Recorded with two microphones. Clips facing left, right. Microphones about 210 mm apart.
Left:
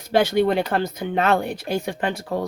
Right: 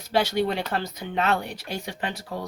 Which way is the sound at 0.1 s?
55° left (ahead or behind).